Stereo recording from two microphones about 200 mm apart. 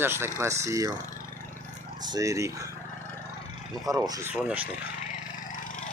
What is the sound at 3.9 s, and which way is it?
Speech, 15° right (ahead or behind).